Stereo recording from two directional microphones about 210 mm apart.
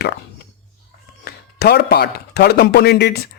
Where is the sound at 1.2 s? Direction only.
50° left (ahead or behind).